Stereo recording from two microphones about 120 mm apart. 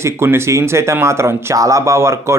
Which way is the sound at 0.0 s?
20° right (ahead or behind).